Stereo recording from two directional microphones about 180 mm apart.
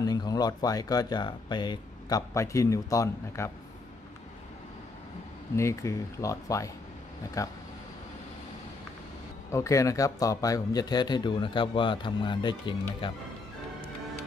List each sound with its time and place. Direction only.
0.0 s a man's voice: 20° left (ahead or behind)
5.6 s a man's voice: 15° left (ahead or behind)
9.5 s a man's voice: 15° left (ahead or behind)